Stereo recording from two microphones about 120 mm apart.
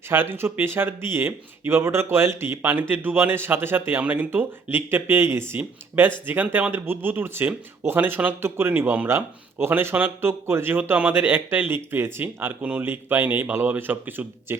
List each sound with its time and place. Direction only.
0.1 s speech: 20° right (ahead or behind)